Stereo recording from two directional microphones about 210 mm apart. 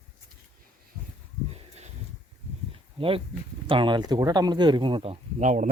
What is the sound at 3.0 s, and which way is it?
Speech, 25° right (ahead or behind).